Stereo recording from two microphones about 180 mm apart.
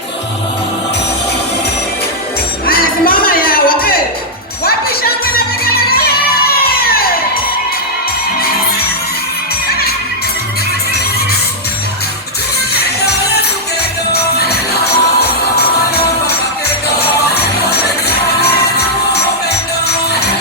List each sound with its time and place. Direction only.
2.6 s music: 55° left (ahead or behind)
9.6 s music: 60° left (ahead or behind)
12.7 s music: 65° left (ahead or behind)